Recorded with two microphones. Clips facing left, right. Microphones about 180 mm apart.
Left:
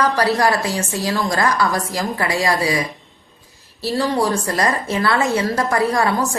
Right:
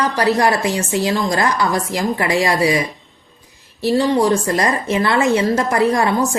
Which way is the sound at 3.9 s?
20° right (ahead or behind).